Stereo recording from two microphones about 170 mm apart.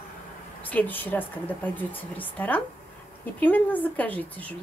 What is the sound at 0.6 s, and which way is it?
Speech, 10° left (ahead or behind).